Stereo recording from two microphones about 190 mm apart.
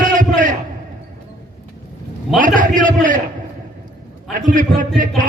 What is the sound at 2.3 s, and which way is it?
Speech, 45° right (ahead or behind).